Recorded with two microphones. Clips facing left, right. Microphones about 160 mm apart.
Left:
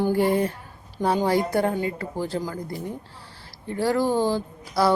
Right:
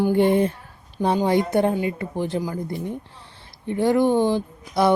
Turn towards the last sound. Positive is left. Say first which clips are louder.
# right 2 dB
turn(degrees=-20)  # may be behind; listen again after turning